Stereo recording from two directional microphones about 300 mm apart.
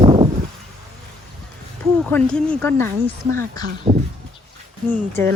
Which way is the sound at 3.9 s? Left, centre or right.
Right.